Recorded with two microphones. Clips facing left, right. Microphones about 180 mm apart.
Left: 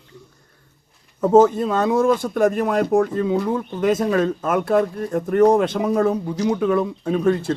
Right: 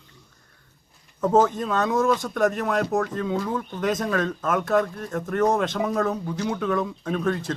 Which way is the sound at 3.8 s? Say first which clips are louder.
Left 6 dB; 10° left (ahead or behind).